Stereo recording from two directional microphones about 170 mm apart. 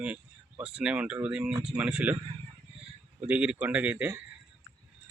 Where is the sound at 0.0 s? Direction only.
5° right (ahead or behind).